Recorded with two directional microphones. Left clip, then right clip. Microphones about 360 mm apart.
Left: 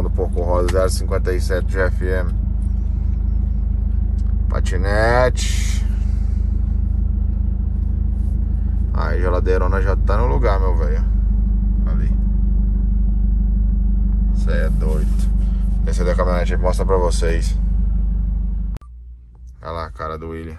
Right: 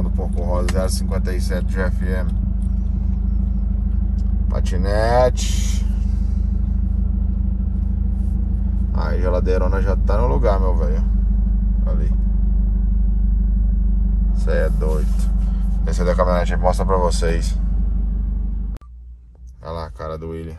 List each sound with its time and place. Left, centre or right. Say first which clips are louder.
0.7 s speech: left 5 dB; centre
4.6 s speech: left 2 dB; centre
8.9 s speech: left 1 dB; centre
14.5 s speech: right 4 dB; centre